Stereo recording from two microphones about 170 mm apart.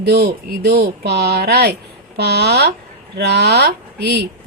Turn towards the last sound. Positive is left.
turn(degrees=-75)  # may be behind; listen again after turning